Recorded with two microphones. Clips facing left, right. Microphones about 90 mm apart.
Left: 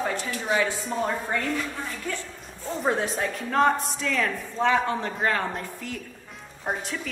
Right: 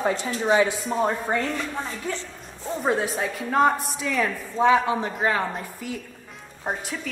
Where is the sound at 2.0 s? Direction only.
20° right (ahead or behind).